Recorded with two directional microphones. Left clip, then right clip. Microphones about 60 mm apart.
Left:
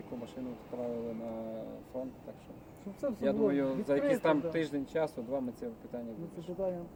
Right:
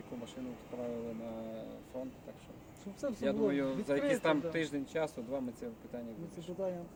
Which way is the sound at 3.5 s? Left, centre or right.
Centre.